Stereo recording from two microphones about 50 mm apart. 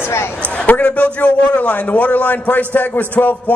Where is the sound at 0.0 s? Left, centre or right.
Left.